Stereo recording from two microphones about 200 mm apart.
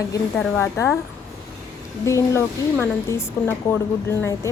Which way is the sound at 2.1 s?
15° left (ahead or behind).